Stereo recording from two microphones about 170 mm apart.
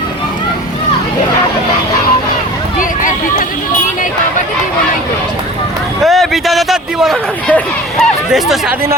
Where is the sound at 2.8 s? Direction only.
50° left (ahead or behind).